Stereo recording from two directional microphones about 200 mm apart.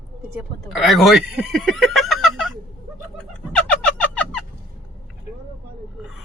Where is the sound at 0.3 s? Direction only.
Centre (ahead or behind).